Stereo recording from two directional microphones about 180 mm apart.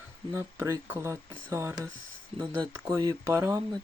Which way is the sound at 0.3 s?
15° right (ahead or behind).